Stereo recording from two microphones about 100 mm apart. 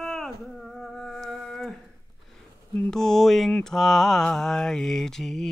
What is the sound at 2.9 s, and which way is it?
Mantra, 5° left (ahead or behind).